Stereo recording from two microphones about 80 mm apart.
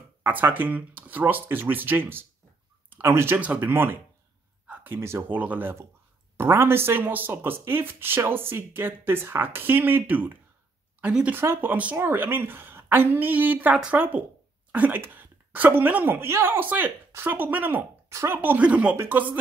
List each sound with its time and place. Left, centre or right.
0.2 s speech: right
11.3 s speech: right